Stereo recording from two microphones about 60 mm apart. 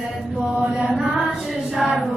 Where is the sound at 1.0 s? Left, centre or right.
Centre.